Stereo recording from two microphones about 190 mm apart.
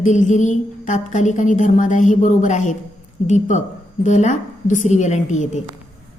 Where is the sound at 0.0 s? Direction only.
40° left (ahead or behind).